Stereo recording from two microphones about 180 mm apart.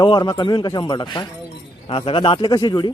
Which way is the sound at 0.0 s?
25° left (ahead or behind).